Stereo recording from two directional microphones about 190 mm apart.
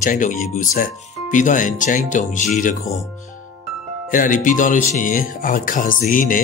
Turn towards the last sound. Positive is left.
turn(degrees=45)  # may be behind; listen again after turning